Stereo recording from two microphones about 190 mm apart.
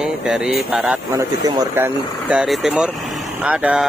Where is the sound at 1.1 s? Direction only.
20° right (ahead or behind).